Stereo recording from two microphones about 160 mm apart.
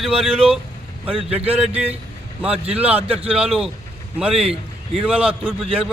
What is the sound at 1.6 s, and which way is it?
A man's voice, 40° right (ahead or behind).